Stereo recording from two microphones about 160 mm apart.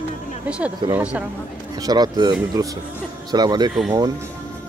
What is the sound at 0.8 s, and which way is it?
Speech, 30° right (ahead or behind).